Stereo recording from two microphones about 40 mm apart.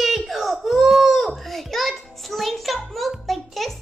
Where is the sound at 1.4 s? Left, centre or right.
Centre.